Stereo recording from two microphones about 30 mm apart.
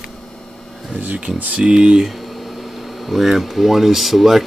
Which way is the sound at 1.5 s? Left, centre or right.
Right.